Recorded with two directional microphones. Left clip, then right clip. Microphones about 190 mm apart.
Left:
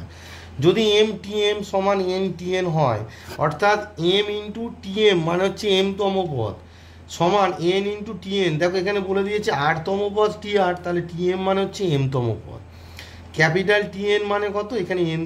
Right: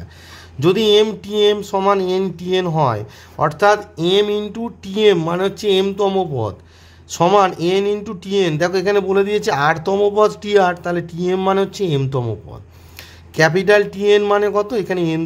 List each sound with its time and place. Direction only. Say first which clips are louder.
0.6 s speech: right 4 dB; 45° right (ahead or behind)
13.4 s speech: right 5 dB; 50° right (ahead or behind)